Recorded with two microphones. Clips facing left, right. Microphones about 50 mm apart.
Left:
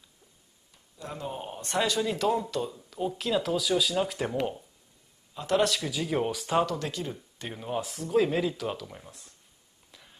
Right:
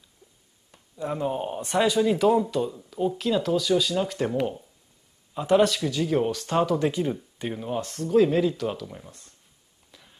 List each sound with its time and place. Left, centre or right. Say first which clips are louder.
0.9 s speech: right 9 dB; right; by 4.6 s centre
5.3 s speech: right 6 dB; centre
5.6 s speech: right 5 dB; centre
6.6 s speech: right 7 dB; centre
7.2 s speech: right 7 dB; centre
9.8 s a sound: right 1 dB; centre